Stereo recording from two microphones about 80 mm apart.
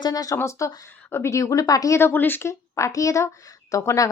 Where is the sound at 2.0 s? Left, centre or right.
Left.